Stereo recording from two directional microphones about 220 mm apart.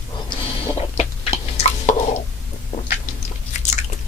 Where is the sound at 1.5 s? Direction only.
30° left (ahead or behind).